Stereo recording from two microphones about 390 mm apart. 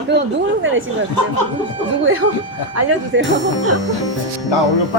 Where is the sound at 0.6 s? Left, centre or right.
Right.